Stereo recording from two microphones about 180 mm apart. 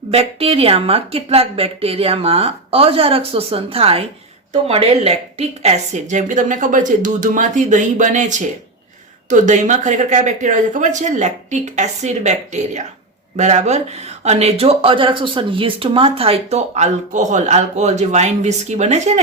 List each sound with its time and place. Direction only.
0.1 s a woman's voice: 35° right (ahead or behind)